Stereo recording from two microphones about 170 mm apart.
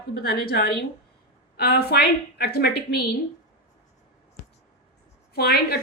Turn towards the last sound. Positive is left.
turn(degrees=65)  # may be behind; listen again after turning